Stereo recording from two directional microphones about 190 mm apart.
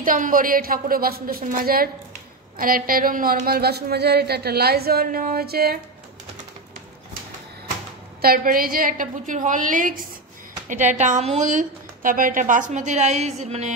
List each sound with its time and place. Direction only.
0.0 s a woman's voice: 45° right (ahead or behind)
8.2 s a woman's voice: 50° right (ahead or behind)